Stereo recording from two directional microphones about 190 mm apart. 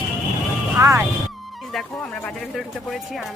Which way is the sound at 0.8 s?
15° right (ahead or behind).